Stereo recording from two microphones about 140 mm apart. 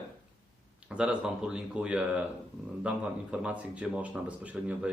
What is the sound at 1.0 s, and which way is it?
Speech, 5° right (ahead or behind).